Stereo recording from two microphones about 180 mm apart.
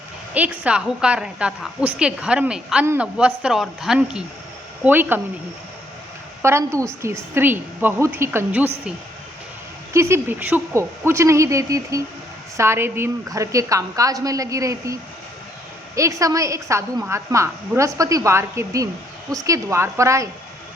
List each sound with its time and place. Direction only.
0.3 s a woman's voice: 10° right (ahead or behind)
6.4 s a woman's voice: 15° right (ahead or behind)
9.9 s a woman's voice: 15° right (ahead or behind)
16.0 s a woman's voice: 15° right (ahead or behind)